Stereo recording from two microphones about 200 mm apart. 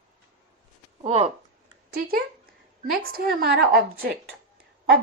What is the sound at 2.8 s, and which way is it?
A woman's voice, 45° right (ahead or behind).